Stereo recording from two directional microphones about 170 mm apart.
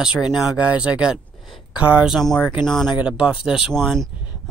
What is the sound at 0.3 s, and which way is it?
Speech, centre (ahead or behind).